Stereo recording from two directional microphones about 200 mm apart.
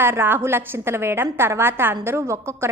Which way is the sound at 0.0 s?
10° right (ahead or behind).